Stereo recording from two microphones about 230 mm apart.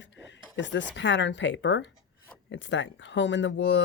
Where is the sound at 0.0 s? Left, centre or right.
Left.